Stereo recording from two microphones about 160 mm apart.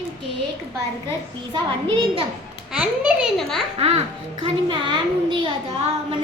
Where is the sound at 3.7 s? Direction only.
40° right (ahead or behind).